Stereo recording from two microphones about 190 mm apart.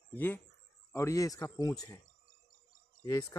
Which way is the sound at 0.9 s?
15° left (ahead or behind).